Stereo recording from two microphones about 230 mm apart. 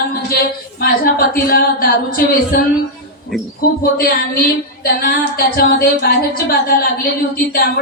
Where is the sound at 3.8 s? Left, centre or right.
Left.